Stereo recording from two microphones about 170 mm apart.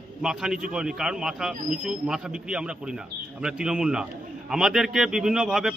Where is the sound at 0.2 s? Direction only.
5° right (ahead or behind).